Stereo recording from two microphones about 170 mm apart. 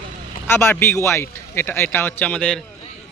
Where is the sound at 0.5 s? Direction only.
15° left (ahead or behind).